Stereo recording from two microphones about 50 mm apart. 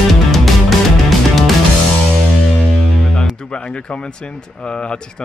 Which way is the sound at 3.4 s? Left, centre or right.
Centre.